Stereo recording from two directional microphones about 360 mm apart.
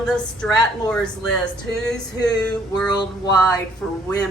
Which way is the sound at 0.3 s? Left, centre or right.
Centre.